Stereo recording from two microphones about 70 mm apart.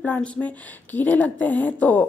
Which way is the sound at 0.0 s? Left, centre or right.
Centre.